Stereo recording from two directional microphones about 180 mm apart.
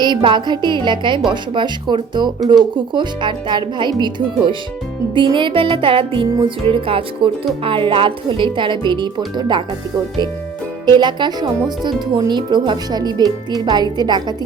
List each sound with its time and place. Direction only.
0.0 s speech: 25° right (ahead or behind)
10.9 s speech: 25° right (ahead or behind)